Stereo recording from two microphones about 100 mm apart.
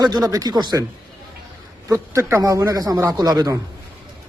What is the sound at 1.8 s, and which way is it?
A man's voice, 30° right (ahead or behind).